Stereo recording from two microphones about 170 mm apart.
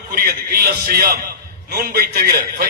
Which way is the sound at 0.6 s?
60° right (ahead or behind).